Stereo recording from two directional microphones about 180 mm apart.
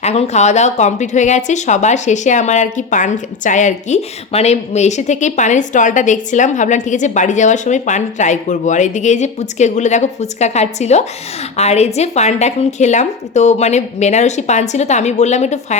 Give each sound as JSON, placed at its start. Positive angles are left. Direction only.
{"t": 0.0, "sound": "speech", "side_deg": 35}